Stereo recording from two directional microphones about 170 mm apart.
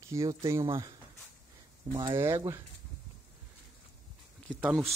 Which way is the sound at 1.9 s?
20° right (ahead or behind).